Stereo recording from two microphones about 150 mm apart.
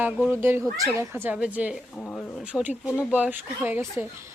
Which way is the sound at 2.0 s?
10° left (ahead or behind).